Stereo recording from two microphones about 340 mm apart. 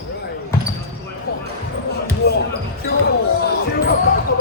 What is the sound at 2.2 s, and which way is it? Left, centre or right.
Speech, left.